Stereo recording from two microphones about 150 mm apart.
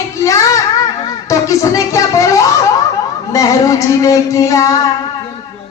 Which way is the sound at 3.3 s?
20° left (ahead or behind).